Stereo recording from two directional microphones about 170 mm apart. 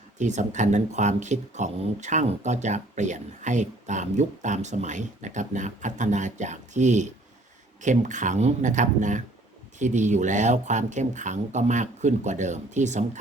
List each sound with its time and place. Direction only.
0.2 s speech: 45° right (ahead or behind)